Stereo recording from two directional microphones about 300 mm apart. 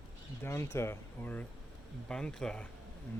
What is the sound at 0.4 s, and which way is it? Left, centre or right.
Speech, centre.